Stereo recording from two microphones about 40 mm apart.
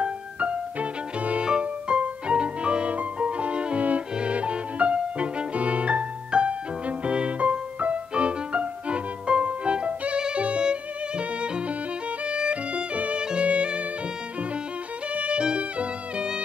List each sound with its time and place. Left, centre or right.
0.0 s violin: right
1.4 s music: right
12.3 s violin: right
15.1 s music: right